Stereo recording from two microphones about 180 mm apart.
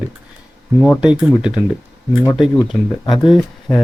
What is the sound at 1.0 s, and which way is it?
Speech, 5° right (ahead or behind).